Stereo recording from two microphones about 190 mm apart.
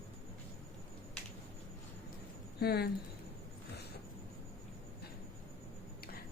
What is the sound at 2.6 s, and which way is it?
Speech, 55° left (ahead or behind).